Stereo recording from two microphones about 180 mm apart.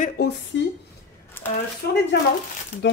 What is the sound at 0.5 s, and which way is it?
Speech, 90° left.